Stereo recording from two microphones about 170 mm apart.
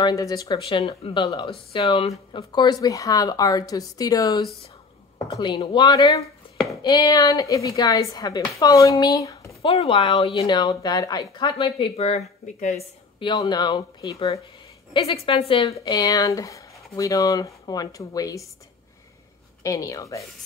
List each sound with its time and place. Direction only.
0.0 s speech: 20° left (ahead or behind)
9.6 s speech: 35° left (ahead or behind)
10.3 s speech: 25° left (ahead or behind); by 12.8 s 40° left (ahead or behind)
13.2 s speech: 25° left (ahead or behind)
19.6 s speech: 20° left (ahead or behind)